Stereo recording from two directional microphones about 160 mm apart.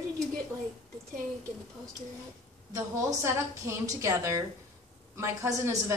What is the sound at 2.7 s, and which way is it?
A woman's voice, 20° right (ahead or behind).